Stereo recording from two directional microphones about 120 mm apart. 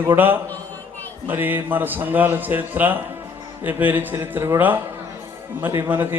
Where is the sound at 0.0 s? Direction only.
15° right (ahead or behind).